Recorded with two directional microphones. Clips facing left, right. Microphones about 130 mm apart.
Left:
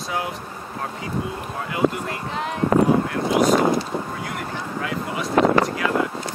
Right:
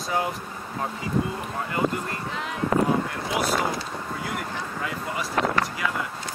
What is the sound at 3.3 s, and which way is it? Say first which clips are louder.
Speech: left 8 dB; 50° left (ahead or behind).